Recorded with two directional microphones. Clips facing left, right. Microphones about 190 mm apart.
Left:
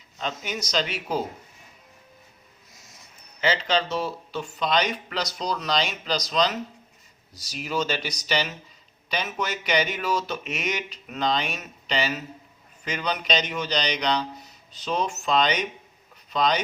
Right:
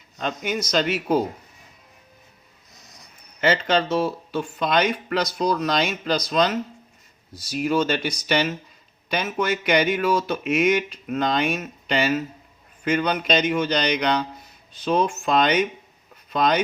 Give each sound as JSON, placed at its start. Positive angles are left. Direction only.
{"t": 0.2, "sound": "speech", "side_deg": -55}
{"t": 2.7, "sound": "a sound", "side_deg": 0}
{"t": 3.4, "sound": "speech", "side_deg": -55}
{"t": 7.6, "sound": "speech", "side_deg": -55}